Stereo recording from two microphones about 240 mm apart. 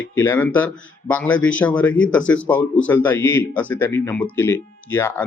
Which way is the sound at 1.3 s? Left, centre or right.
Left.